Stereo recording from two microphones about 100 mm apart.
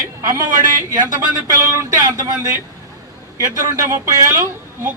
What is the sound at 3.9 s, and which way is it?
Speech, 35° right (ahead or behind).